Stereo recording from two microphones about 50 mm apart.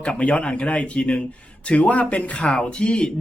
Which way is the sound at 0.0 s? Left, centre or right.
Left.